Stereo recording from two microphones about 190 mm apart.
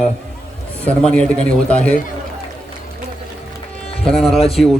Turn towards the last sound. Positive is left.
turn(degrees=30)  # may be behind; listen again after turning